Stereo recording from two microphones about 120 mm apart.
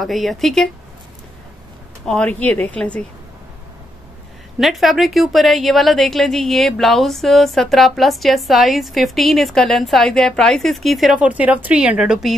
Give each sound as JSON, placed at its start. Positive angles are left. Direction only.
{"t": 0.0, "sound": "a woman's voice", "side_deg": 0}
{"t": 2.0, "sound": "speech", "side_deg": 10}
{"t": 4.6, "sound": "a woman's voice", "side_deg": 0}
{"t": 11.1, "sound": "speech", "side_deg": -10}